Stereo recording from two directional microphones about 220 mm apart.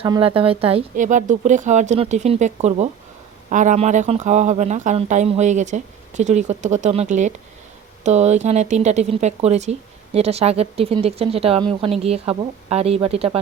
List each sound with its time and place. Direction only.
0.0 s speech: 25° right (ahead or behind)